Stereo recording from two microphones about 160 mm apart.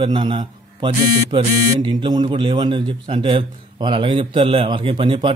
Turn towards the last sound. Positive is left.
turn(degrees=-30)  # may be behind; listen again after turning